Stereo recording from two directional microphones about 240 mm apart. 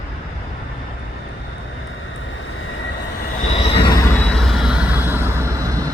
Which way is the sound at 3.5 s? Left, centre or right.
Left.